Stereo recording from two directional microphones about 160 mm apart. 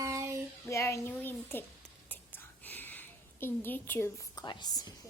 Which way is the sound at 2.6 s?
10° left (ahead or behind).